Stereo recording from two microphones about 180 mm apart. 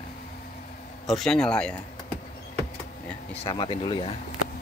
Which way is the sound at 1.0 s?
Centre (ahead or behind).